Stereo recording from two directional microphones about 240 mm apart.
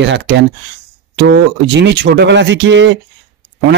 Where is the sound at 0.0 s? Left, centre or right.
Right.